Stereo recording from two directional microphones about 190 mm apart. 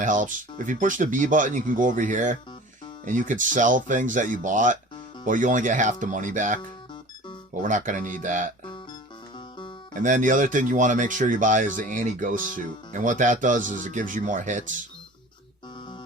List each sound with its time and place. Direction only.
0.0 s speech: 45° right (ahead or behind)
8.6 s music: 25° left (ahead or behind)
9.9 s speech: 40° right (ahead or behind)